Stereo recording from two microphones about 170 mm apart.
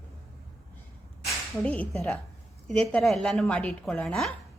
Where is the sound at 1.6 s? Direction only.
10° left (ahead or behind).